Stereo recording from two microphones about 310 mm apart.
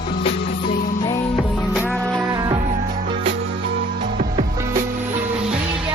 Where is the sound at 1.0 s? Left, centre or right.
Centre.